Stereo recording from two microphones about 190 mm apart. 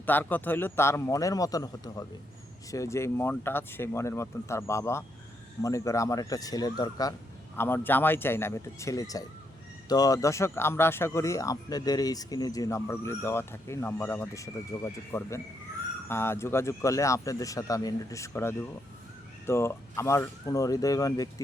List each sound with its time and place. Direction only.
0.0 s speech: 10° left (ahead or behind)